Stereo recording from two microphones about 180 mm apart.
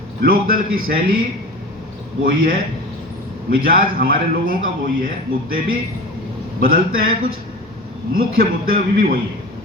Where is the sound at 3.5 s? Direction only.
50° right (ahead or behind).